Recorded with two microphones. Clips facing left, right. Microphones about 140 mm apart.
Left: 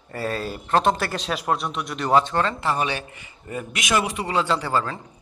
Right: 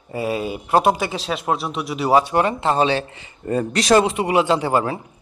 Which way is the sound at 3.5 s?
35° right (ahead or behind).